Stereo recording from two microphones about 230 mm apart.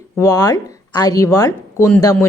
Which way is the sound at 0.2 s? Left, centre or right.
Centre.